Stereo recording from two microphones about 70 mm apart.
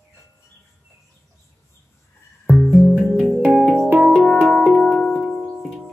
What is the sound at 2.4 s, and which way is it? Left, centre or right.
Music, centre.